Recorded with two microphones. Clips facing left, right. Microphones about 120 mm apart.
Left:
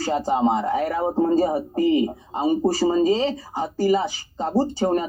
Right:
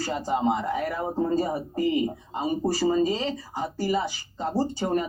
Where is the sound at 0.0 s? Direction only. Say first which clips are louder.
Left 5 dB; 30° left (ahead or behind).